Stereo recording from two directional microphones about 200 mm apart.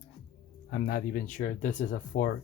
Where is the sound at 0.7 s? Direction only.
50° left (ahead or behind).